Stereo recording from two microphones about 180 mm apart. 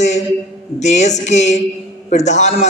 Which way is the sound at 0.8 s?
40° left (ahead or behind).